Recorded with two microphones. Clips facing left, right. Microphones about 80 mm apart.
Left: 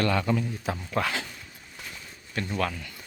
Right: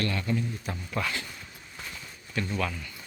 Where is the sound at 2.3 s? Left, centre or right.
Left.